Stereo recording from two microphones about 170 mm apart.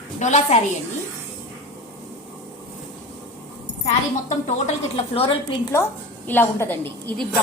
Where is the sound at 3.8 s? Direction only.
45° left (ahead or behind).